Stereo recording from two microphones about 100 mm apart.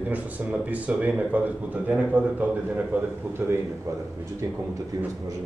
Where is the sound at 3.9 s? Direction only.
30° right (ahead or behind).